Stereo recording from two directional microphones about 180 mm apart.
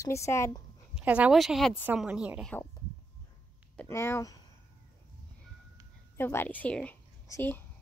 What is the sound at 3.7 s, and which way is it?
Speech, 10° left (ahead or behind).